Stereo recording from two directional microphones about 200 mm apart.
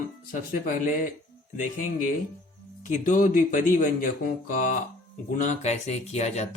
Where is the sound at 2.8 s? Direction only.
40° left (ahead or behind).